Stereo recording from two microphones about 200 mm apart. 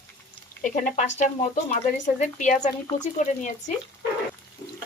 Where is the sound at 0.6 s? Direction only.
35° left (ahead or behind).